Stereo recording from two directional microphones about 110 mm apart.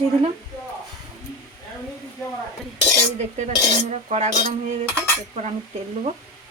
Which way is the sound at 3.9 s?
85° right.